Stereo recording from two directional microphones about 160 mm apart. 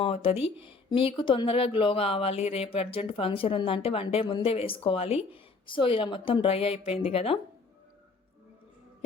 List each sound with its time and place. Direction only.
0.0 s speech: 35° left (ahead or behind)